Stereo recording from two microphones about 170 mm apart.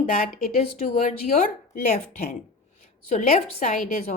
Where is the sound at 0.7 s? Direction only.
40° left (ahead or behind).